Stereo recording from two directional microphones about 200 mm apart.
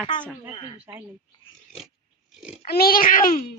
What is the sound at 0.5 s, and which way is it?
Speech, 25° left (ahead or behind).